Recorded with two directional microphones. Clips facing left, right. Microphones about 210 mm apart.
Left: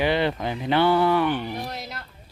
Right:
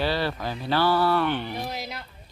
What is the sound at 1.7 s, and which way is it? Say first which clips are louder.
Speech: right 1 dB; centre (ahead or behind).